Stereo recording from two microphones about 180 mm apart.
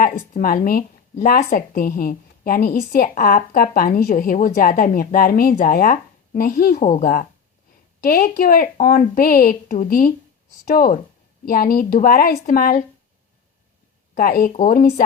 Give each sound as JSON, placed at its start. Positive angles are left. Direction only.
{"t": 0.0, "sound": "a woman's voice", "side_deg": 50}
{"t": 14.2, "sound": "a woman's voice", "side_deg": 50}